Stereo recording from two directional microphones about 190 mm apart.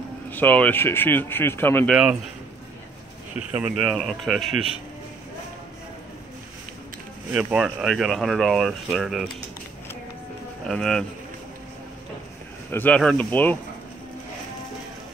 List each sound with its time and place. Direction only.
0.3 s speech: 10° left (ahead or behind)
3.3 s speech: 5° right (ahead or behind)
7.3 s speech: centre (ahead or behind)
10.7 s speech: 5° left (ahead or behind)
12.7 s speech: 5° left (ahead or behind)